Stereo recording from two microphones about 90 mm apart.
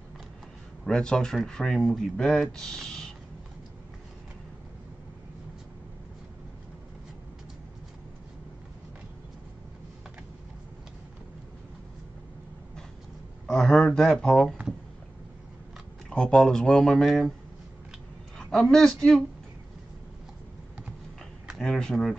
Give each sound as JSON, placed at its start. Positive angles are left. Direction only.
{"t": 0.8, "sound": "speech", "side_deg": 10}
{"t": 13.5, "sound": "speech", "side_deg": 5}
{"t": 16.1, "sound": "speech", "side_deg": 5}
{"t": 18.4, "sound": "speech", "side_deg": 5}
{"t": 21.5, "sound": "speech", "side_deg": 5}